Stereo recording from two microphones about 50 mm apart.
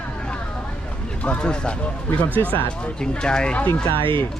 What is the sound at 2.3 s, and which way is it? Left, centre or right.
Speech, left.